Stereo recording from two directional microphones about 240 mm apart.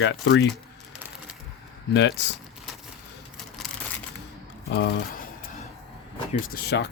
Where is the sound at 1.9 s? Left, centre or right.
Left.